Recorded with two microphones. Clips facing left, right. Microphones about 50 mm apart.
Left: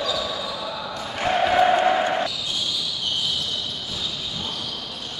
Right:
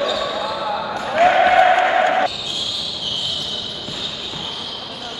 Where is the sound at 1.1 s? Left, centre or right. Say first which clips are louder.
Right 8 dB; right.